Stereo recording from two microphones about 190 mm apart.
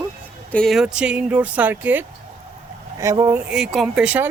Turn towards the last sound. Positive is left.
turn(degrees=-5)  # may be behind; listen again after turning